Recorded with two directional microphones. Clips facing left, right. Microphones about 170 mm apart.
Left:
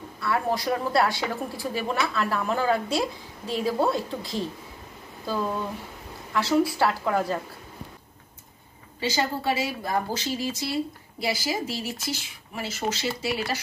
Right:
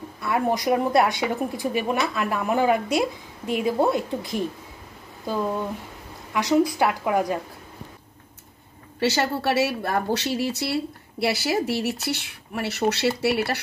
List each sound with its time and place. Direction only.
0.2 s a woman's voice: 20° right (ahead or behind)
6.8 s a woman's voice: 15° right (ahead or behind)
9.0 s a woman's voice: 70° right (ahead or behind)